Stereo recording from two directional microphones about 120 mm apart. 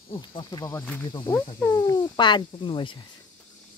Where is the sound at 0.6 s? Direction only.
15° left (ahead or behind).